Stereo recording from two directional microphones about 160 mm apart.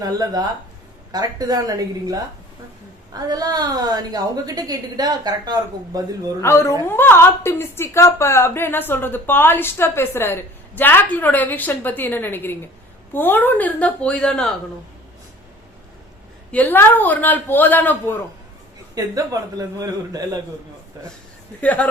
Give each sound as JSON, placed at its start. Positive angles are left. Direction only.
{"t": 0.0, "sound": "a woman's voice", "side_deg": -25}
{"t": 6.4, "sound": "a woman's voice", "side_deg": 15}
{"t": 16.5, "sound": "a woman's voice", "side_deg": 10}
{"t": 18.9, "sound": "a woman's voice", "side_deg": -20}
{"t": 21.6, "sound": "a woman's voice", "side_deg": 10}